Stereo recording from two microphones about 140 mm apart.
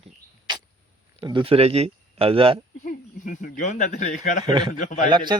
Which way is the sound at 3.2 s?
70° left (ahead or behind).